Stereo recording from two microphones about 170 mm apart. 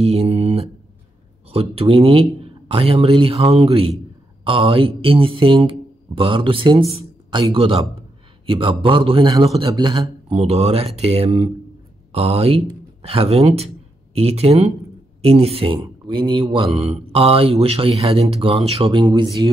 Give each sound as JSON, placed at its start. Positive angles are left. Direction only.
{"t": 0.0, "sound": "mantra", "side_deg": -40}
{"t": 1.5, "sound": "speech", "side_deg": -35}